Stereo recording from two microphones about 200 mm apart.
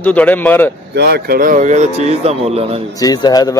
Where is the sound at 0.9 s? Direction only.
55° right (ahead or behind); by 2.8 s 30° right (ahead or behind).